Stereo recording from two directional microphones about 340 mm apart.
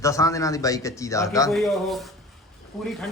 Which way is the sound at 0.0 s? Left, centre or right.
Centre.